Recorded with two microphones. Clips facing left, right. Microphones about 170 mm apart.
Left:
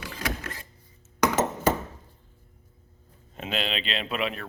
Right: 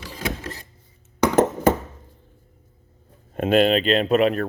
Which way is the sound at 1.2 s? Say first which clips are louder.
Right 6 dB; 55° right (ahead or behind).